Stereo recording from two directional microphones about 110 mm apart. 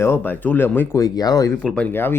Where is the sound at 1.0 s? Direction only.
35° left (ahead or behind).